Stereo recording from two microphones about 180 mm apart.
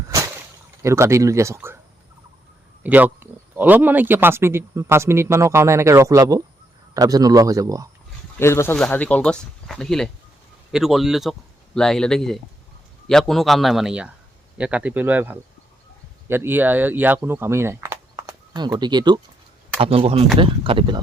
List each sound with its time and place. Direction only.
0.8 s speech: 15° right (ahead or behind)
2.8 s a man's voice: 10° right (ahead or behind)
8.4 s a man's voice: 15° left (ahead or behind); by 21.0 s 25° right (ahead or behind)